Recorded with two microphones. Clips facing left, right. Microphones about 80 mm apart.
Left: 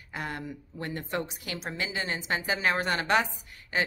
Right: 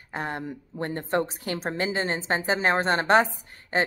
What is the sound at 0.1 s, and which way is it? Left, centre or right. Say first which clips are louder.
A woman's voice: right 4 dB; right.